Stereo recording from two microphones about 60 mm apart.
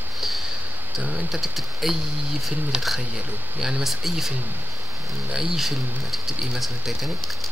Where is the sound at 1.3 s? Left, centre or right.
Centre.